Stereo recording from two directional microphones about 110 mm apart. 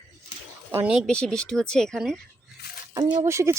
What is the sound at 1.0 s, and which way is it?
Speech, 10° left (ahead or behind).